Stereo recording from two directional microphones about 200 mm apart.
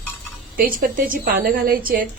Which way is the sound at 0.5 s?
45° right (ahead or behind).